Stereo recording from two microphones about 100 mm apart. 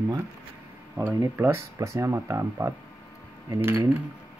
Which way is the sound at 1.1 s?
25° right (ahead or behind).